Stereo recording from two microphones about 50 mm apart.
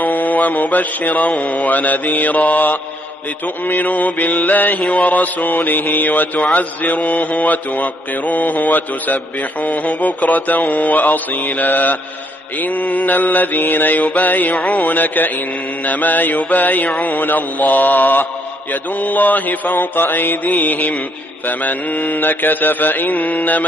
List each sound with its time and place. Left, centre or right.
0.0 s mantra: left
4.7 s mantra: centre
5.0 s mantra: left